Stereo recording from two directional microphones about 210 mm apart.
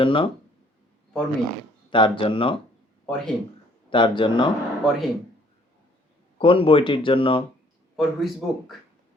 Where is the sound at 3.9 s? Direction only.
25° left (ahead or behind).